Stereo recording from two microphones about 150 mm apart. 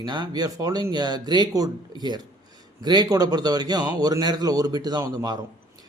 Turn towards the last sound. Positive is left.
turn(degrees=-25)  # may be behind; listen again after turning